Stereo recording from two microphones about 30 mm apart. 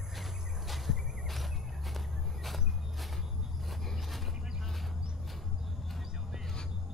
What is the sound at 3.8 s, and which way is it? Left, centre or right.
Vehicle, centre.